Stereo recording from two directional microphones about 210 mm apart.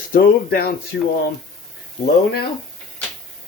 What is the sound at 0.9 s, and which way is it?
Speech, 55° left (ahead or behind).